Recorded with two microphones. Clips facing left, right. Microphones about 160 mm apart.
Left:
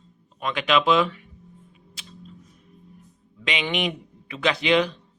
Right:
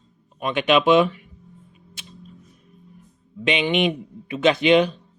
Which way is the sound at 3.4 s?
25° right (ahead or behind).